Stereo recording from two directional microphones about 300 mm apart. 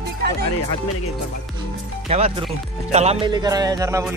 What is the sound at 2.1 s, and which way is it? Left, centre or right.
Speech, centre.